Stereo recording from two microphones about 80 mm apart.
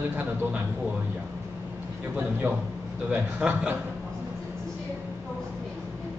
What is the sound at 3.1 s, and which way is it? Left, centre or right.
Speech, right.